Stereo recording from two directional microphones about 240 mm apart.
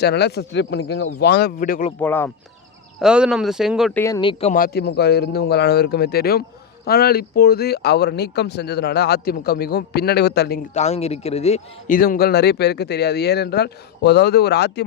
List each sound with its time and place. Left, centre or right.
0.0 s a man's voice: left
2.0 s speech: centre
3.0 s speech: centre
4.0 s speech: centre
4.5 s a man's voice: left
10.8 s a man's voice: left